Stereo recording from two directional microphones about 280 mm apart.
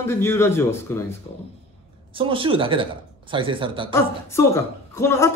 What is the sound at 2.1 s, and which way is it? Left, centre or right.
Speech, centre.